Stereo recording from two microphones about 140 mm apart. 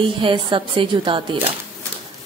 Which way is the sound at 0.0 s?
35° right (ahead or behind).